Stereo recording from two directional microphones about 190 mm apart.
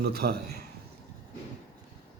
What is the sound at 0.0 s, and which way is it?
Speech, 55° right (ahead or behind).